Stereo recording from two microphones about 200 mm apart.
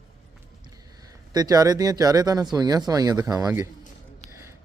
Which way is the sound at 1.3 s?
20° right (ahead or behind).